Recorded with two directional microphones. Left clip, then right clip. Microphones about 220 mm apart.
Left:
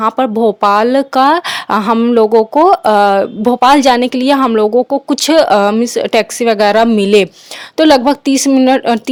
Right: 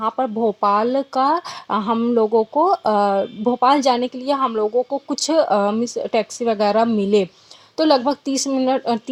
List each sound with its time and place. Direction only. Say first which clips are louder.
0.0 s speech: left 8 dB; 35° left (ahead or behind)